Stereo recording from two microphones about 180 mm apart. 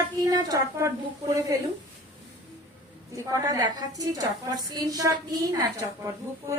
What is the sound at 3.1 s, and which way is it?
A woman's voice, 20° right (ahead or behind).